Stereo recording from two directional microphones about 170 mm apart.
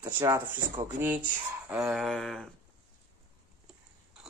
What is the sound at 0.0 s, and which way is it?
Speech, 15° right (ahead or behind).